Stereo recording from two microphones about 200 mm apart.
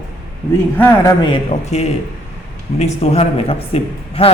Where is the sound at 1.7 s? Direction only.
35° left (ahead or behind).